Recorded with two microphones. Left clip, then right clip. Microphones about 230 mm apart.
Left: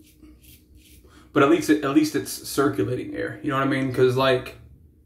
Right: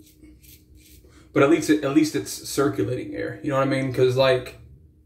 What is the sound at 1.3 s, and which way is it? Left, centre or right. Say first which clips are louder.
Speech: even; centre.